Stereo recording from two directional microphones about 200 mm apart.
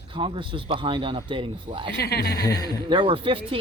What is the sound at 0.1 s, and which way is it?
Speech, 25° right (ahead or behind).